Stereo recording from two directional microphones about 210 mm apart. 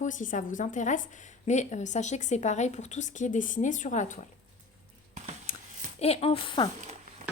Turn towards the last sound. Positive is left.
turn(degrees=25)  # may be behind; listen again after turning